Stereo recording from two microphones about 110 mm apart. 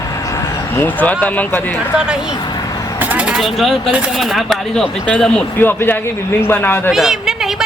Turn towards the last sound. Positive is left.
turn(degrees=-5)  # may be behind; listen again after turning